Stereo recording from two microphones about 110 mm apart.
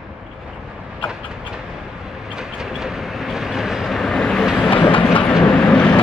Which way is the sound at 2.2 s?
5° right (ahead or behind).